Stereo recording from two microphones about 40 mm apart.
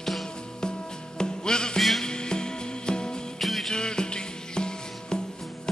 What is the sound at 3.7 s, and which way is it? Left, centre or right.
Music, centre.